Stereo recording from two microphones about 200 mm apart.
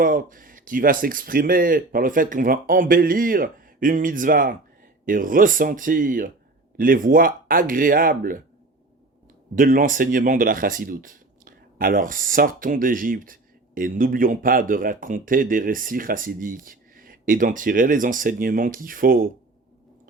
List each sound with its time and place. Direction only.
0.0 s speech: 45° right (ahead or behind)
9.6 s speech: 40° right (ahead or behind)